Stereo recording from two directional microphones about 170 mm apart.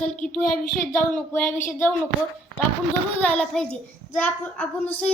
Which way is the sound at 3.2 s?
5° left (ahead or behind).